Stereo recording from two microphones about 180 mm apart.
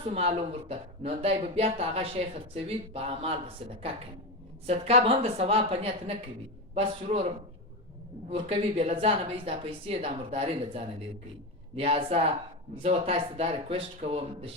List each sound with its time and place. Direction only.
0.0 s speech: 35° right (ahead or behind)
8.3 s speech: 30° right (ahead or behind)